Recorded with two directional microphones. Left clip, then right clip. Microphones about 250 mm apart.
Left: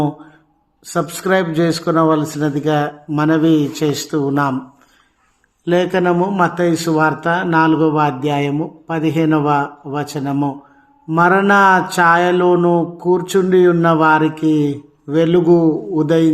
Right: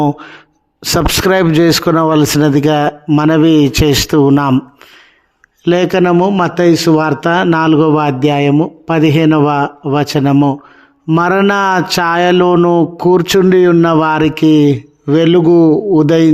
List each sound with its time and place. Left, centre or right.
0.8 s mantra: right
5.6 s mantra: right